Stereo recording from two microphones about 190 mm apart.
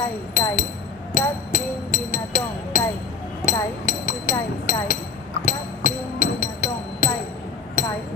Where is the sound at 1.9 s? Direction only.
45° left (ahead or behind).